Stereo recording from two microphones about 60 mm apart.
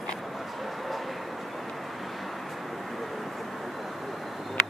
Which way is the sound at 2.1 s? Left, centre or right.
Centre.